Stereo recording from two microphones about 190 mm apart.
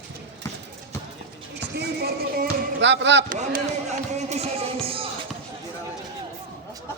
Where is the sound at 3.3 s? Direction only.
40° right (ahead or behind).